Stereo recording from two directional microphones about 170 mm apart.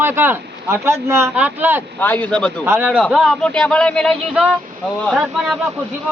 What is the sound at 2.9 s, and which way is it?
Speech, centre (ahead or behind).